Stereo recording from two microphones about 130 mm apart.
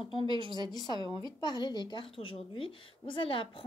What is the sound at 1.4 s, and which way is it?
A woman's voice, 35° left (ahead or behind).